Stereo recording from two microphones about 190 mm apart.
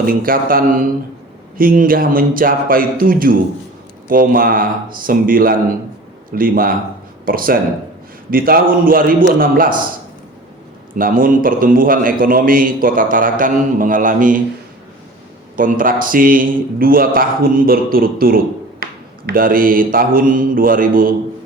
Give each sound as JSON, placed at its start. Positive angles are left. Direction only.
{"t": 0.0, "sound": "a man's voice", "side_deg": -50}
{"t": 10.9, "sound": "a man's voice", "side_deg": -45}
{"t": 15.5, "sound": "a man's voice", "side_deg": -45}